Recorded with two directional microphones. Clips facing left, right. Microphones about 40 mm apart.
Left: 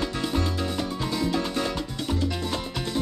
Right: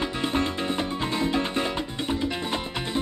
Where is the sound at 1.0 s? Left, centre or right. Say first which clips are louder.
Even; right.